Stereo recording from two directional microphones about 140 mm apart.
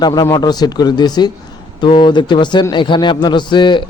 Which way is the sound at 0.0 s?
30° left (ahead or behind).